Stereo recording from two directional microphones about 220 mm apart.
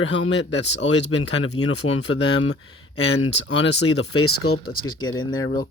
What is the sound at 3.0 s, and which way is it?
Speech, 60° left (ahead or behind).